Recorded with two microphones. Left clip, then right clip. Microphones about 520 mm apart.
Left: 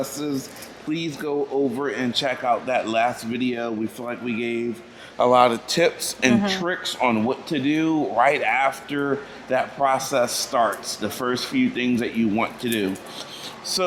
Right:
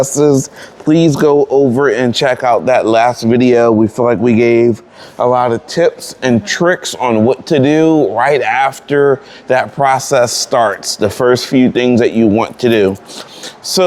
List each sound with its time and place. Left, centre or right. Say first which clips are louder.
0.1 s speech: right 18 dB; right
0.9 s speech: right 18 dB; right
5.1 s speech: right 5 dB; right
6.5 s speech: right 12 dB; right